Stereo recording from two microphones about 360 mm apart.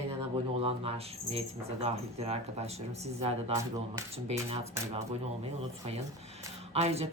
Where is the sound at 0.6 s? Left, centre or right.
Centre.